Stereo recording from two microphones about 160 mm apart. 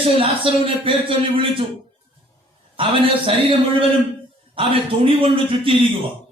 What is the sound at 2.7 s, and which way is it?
Speech, 35° right (ahead or behind).